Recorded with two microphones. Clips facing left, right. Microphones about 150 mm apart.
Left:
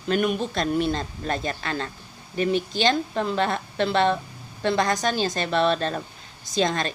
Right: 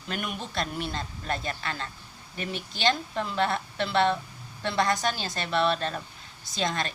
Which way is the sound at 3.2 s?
25° left (ahead or behind).